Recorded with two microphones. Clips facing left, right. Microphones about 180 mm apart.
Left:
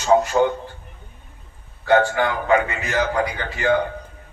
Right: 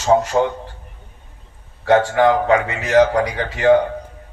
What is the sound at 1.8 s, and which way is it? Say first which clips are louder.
A man's voice: right 4 dB; 75° right (ahead or behind).